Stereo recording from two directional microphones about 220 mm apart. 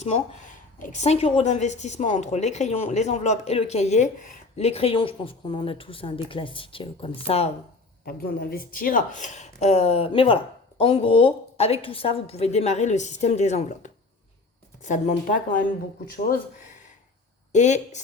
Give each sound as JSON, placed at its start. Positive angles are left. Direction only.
{"t": 0.0, "sound": "speech", "side_deg": 35}
{"t": 8.0, "sound": "speech", "side_deg": 45}